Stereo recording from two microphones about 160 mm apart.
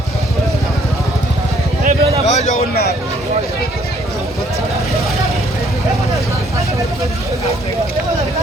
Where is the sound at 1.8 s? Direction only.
40° right (ahead or behind).